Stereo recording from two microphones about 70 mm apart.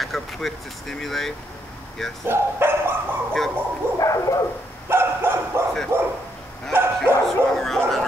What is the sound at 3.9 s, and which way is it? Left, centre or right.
Bow-wow, left.